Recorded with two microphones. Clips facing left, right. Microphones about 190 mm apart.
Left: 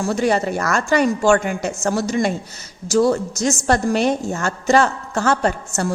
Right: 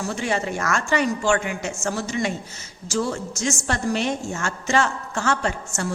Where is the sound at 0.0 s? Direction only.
40° left (ahead or behind).